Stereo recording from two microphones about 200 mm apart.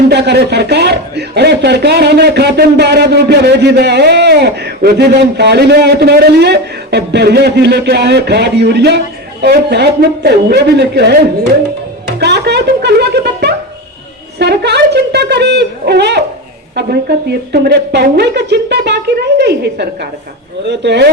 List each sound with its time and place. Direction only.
0.1 s speech: 55° right (ahead or behind)
12.2 s music: 55° right (ahead or behind)
14.3 s speech: 55° right (ahead or behind)